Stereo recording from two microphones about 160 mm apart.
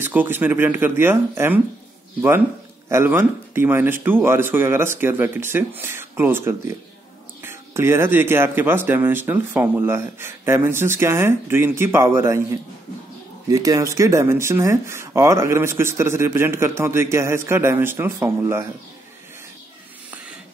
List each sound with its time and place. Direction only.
0.0 s speech: 10° right (ahead or behind)
2.9 s speech: 15° right (ahead or behind)